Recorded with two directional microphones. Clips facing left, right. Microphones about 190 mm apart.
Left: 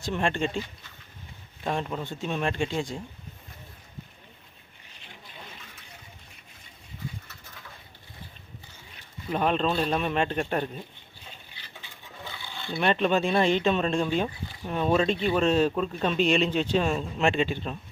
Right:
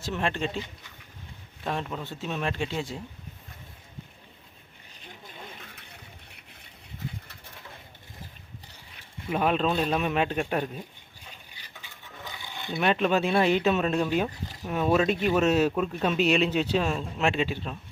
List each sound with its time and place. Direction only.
0.0 s a man's voice: centre (ahead or behind)
1.6 s a man's voice: centre (ahead or behind)
5.0 s a sound: 50° right (ahead or behind)
9.3 s a man's voice: 5° right (ahead or behind)
12.2 s a sound: 15° right (ahead or behind)
12.7 s a man's voice: centre (ahead or behind)